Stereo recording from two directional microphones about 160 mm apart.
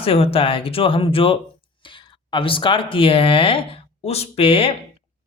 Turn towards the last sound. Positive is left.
turn(degrees=35)  # may be behind; listen again after turning